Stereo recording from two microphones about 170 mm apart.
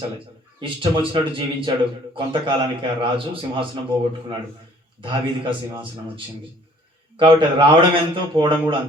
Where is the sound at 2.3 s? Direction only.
30° right (ahead or behind).